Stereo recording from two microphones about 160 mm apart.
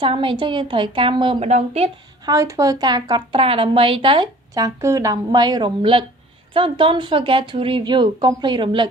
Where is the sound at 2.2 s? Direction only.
20° right (ahead or behind).